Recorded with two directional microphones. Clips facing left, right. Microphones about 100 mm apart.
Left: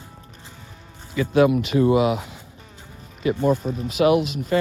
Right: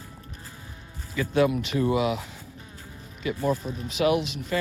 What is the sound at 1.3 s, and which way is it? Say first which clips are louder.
Speech: left 6 dB; 75° left (ahead or behind).